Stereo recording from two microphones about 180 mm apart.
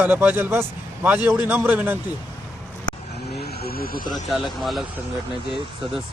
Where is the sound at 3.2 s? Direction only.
65° left (ahead or behind).